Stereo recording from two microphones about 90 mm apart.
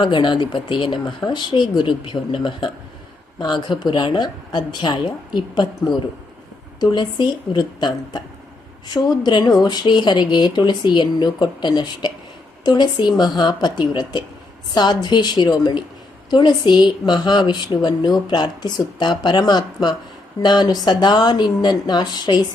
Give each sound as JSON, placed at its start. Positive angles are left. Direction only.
{"t": 0.0, "sound": "a woman's voice", "side_deg": 60}
{"t": 3.3, "sound": "a woman's voice", "side_deg": 55}